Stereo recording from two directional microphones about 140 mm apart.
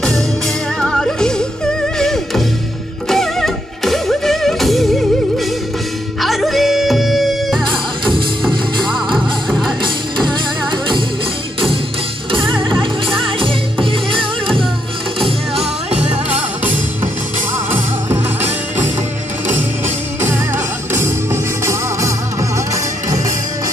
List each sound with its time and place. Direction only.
0.7 s music: 5° left (ahead or behind)
6.2 s music: centre (ahead or behind)
12.4 s music: 5° left (ahead or behind)
12.7 s music: 40° right (ahead or behind)
20.2 s music: 20° right (ahead or behind)